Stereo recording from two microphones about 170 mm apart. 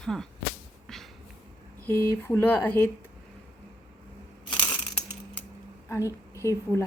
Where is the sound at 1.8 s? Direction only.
15° left (ahead or behind).